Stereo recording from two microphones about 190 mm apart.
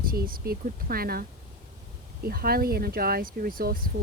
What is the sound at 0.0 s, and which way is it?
Speech, 50° right (ahead or behind).